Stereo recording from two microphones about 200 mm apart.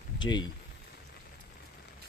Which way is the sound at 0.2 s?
20° left (ahead or behind).